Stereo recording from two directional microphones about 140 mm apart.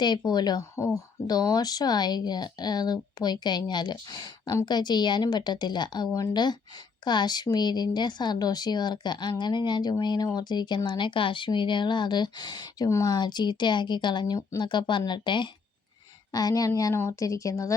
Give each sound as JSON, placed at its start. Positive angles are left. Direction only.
{"t": 0.3, "sound": "speech", "side_deg": 30}
{"t": 6.1, "sound": "speech", "side_deg": 20}
{"t": 6.3, "sound": "speech", "side_deg": 30}